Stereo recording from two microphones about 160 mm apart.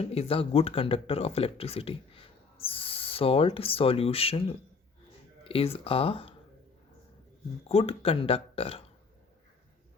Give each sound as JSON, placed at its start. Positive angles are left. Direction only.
{"t": 0.0, "sound": "speech", "side_deg": 40}
{"t": 7.7, "sound": "speech", "side_deg": 35}